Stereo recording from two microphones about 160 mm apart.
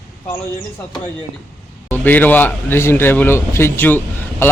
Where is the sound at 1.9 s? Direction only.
10° left (ahead or behind).